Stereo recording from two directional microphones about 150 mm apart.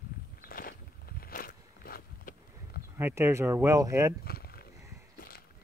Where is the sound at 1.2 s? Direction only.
70° left (ahead or behind).